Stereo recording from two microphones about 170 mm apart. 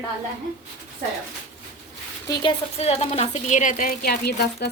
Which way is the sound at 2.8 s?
35° left (ahead or behind).